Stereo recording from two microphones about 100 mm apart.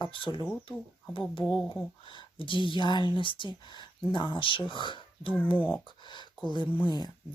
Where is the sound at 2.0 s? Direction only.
55° left (ahead or behind).